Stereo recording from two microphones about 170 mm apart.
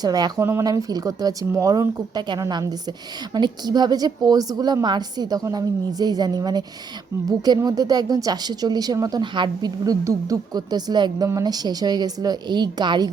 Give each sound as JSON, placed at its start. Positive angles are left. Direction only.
{"t": 0.0, "sound": "a woman's voice", "side_deg": -20}